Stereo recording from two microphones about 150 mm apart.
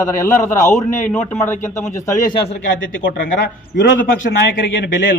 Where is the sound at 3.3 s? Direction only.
70° left (ahead or behind).